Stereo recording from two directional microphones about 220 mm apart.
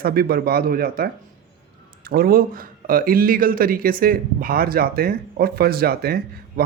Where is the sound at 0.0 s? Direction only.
45° right (ahead or behind).